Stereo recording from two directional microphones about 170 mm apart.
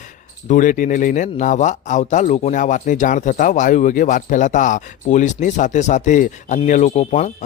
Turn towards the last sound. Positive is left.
turn(degrees=45)  # may be behind; listen again after turning